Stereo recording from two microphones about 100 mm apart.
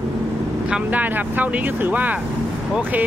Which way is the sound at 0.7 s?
10° right (ahead or behind).